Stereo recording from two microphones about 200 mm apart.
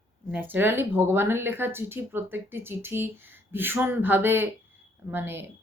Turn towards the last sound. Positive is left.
turn(degrees=-10)  # may be behind; listen again after turning